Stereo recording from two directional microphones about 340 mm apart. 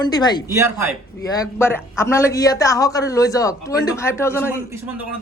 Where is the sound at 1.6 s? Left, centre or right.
Centre.